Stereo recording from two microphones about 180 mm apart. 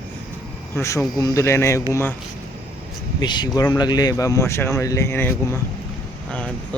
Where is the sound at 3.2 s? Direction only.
25° left (ahead or behind).